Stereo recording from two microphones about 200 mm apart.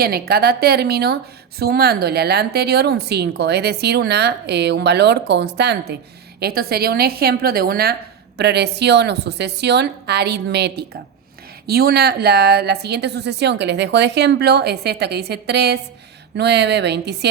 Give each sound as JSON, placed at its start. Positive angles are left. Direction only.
{"t": 0.0, "sound": "a woman's voice", "side_deg": -50}